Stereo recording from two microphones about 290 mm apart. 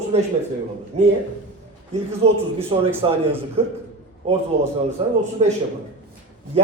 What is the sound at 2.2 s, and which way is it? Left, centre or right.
A man's voice, centre.